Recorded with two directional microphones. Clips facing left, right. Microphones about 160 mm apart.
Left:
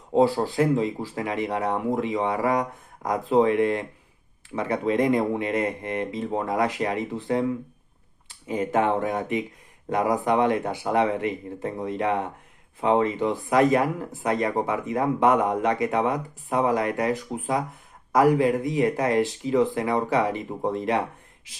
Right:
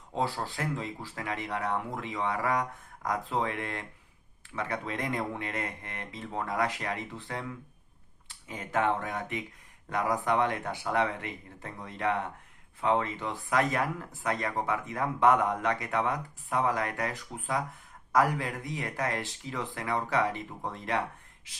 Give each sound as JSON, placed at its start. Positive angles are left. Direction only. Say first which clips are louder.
{"t": 0.2, "sound": "speech", "louder": "left 12 dB", "side_deg": 20}
{"t": 20.5, "sound": "speech", "louder": "left 11 dB", "side_deg": 30}
{"t": 20.7, "sound": "speech", "louder": "left 6 dB", "side_deg": 20}